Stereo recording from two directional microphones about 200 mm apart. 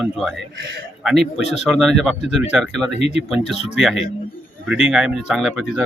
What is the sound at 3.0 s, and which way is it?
Speech, 30° left (ahead or behind).